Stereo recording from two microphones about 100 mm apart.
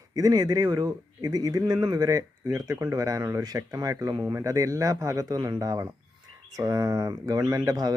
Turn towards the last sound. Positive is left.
turn(degrees=-40)  # may be behind; listen again after turning